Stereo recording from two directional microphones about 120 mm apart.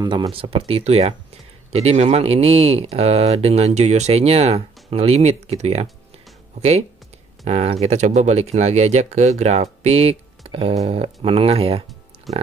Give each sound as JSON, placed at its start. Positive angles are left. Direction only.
{"t": 0.0, "sound": "speech", "side_deg": -35}
{"t": 0.3, "sound": "speech", "side_deg": -55}
{"t": 7.4, "sound": "speech", "side_deg": -65}
{"t": 12.3, "sound": "speech", "side_deg": 0}